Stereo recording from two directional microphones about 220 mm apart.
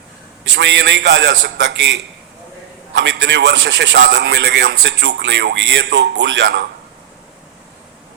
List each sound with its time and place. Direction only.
0.5 s a man's voice: 55° right (ahead or behind)